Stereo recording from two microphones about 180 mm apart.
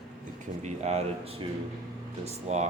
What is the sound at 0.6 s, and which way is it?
Speech, 40° right (ahead or behind).